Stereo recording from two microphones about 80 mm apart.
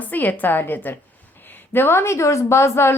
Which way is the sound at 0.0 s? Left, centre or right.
Left.